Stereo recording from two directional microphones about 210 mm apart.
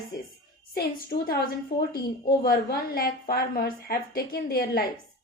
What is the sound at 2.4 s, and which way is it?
A woman's voice, 45° left (ahead or behind).